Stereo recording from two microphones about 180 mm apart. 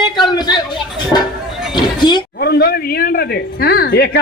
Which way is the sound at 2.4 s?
60° left (ahead or behind).